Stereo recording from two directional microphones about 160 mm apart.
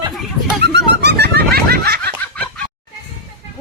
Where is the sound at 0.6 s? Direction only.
90° right.